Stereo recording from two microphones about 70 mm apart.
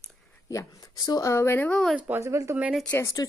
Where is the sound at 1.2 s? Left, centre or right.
Left.